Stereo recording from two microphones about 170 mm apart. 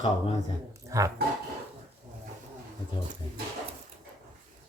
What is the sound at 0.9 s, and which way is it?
Speech, 20° right (ahead or behind).